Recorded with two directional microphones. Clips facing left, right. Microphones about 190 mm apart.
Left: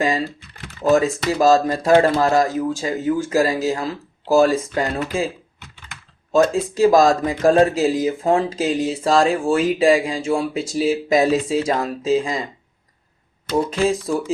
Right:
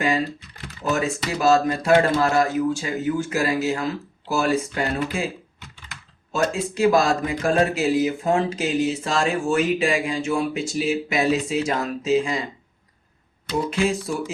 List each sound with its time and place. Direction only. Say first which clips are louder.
0.9 s speech: left 7 dB; 35° left (ahead or behind)
6.3 s speech: left 7 dB; 35° left (ahead or behind)
13.7 s speech: even; 35° left (ahead or behind)